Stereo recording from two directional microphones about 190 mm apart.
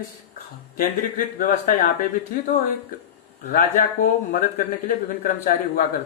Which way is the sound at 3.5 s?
40° left (ahead or behind).